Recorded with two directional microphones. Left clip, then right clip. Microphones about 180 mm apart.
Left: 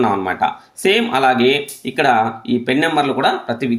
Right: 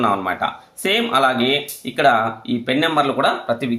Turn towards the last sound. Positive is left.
turn(degrees=10)  # may be behind; listen again after turning